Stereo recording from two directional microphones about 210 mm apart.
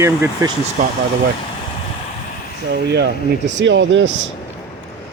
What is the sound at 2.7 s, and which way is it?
Speech, 50° right (ahead or behind).